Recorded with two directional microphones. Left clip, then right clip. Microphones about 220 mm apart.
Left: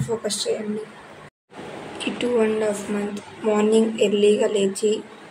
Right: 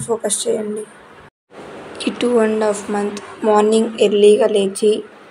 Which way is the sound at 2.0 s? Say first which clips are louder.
Right 5 dB; 20° right (ahead or behind).